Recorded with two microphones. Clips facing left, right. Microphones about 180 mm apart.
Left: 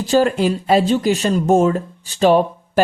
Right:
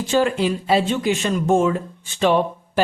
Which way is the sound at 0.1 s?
40° left (ahead or behind).